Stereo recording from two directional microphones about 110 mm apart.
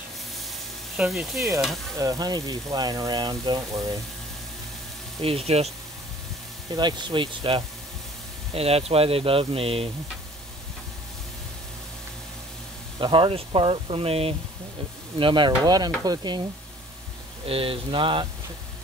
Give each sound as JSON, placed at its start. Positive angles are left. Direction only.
{"t": 0.9, "sound": "speech", "side_deg": -5}
{"t": 2.0, "sound": "speech", "side_deg": -35}
{"t": 5.2, "sound": "speech", "side_deg": -65}
{"t": 6.7, "sound": "speech", "side_deg": -40}
{"t": 8.5, "sound": "speech", "side_deg": -65}
{"t": 13.0, "sound": "speech", "side_deg": -50}
{"t": 15.1, "sound": "speech", "side_deg": -50}
{"t": 17.5, "sound": "speech", "side_deg": -60}